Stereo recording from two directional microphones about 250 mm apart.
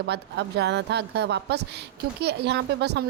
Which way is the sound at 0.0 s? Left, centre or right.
Right.